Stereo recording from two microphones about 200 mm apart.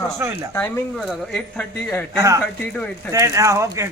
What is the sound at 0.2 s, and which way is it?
Speech, 10° right (ahead or behind).